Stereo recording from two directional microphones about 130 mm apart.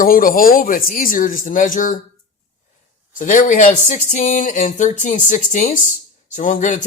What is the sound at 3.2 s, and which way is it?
Speech, 80° left.